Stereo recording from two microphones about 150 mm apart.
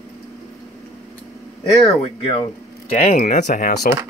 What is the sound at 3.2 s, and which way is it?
Speech, 65° left (ahead or behind).